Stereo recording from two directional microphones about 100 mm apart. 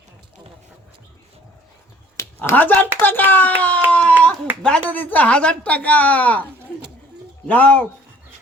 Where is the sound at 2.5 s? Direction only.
15° left (ahead or behind).